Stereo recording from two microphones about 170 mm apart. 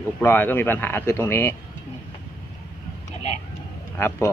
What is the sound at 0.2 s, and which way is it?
Speech, 10° left (ahead or behind).